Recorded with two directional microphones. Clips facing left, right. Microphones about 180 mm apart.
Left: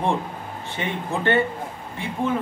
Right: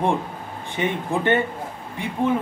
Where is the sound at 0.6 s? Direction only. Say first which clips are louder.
Right 4 dB; 15° right (ahead or behind).